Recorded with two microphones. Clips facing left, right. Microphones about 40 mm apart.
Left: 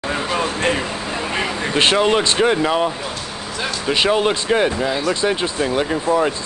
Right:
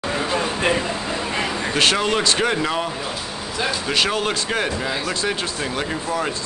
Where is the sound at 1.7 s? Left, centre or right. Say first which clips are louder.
Left 4 dB; centre.